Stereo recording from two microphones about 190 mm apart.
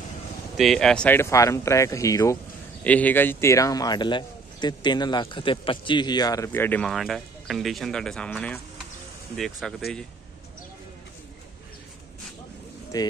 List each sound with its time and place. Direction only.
0.6 s a man's voice: centre (ahead or behind)
12.9 s a man's voice: 20° left (ahead or behind)